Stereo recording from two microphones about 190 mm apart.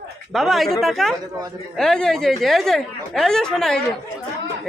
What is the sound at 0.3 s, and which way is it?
Speech, centre (ahead or behind).